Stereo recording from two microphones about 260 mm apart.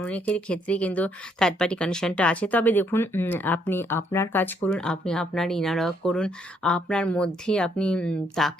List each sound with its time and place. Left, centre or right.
0.0 s speech: centre